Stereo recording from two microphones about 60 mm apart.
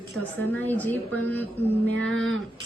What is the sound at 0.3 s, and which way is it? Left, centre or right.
A woman's voice, left.